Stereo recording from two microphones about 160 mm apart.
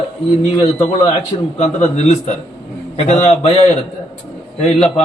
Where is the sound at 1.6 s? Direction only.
45° left (ahead or behind).